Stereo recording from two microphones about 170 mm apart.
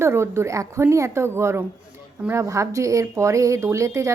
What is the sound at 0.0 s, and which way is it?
Speech, 15° right (ahead or behind).